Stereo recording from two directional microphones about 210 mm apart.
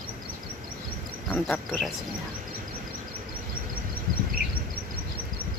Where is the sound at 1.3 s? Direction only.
5° left (ahead or behind).